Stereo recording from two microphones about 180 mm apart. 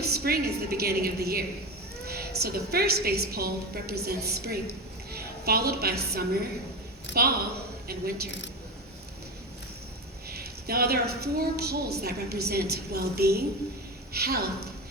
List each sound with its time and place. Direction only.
0.0 s a woman's voice: 60° right (ahead or behind)
7.1 s a woman's voice: 80° left
7.9 s a woman's voice: 60° right (ahead or behind)
10.2 s a woman's voice: 60° right (ahead or behind)